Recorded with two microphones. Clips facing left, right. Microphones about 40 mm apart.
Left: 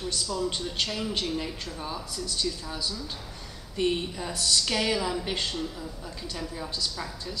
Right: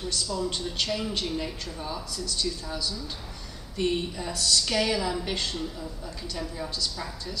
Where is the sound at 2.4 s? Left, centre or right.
Centre.